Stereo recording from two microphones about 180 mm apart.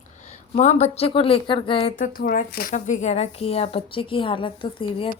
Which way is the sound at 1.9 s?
50° left (ahead or behind).